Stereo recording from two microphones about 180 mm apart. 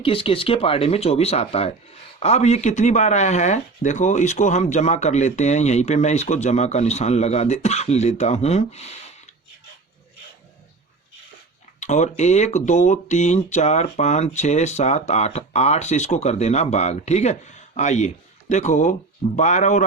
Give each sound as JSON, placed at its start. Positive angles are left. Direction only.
{"t": 0.0, "sound": "speech", "side_deg": 30}
{"t": 11.8, "sound": "speech", "side_deg": 40}